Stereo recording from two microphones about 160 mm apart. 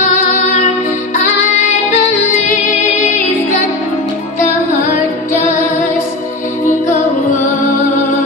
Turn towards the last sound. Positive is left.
turn(degrees=50)  # may be behind; listen again after turning